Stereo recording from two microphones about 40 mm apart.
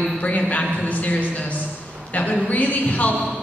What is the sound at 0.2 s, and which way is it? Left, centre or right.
A woman's voice, left.